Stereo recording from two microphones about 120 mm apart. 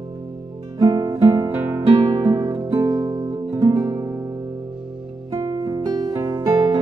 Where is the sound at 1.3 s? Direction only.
20° right (ahead or behind).